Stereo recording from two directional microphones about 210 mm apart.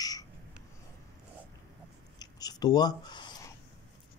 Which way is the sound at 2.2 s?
20° left (ahead or behind).